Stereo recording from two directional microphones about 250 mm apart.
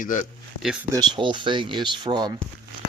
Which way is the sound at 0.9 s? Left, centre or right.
Centre.